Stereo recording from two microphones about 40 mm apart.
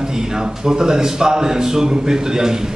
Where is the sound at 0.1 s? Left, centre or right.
Centre.